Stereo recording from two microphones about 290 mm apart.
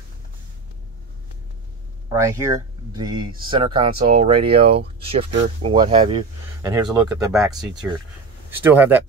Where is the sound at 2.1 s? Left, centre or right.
Centre.